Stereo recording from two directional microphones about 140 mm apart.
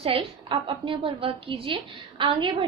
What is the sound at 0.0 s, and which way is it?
A woman's voice, 40° right (ahead or behind).